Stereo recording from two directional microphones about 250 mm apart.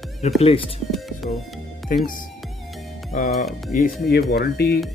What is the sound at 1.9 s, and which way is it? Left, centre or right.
Speech, left.